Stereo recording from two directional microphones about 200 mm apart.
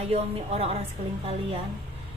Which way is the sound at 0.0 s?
30° right (ahead or behind).